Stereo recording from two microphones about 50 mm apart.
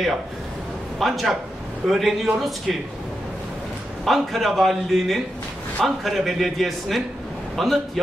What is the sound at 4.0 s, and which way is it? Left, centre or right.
A man's voice, centre.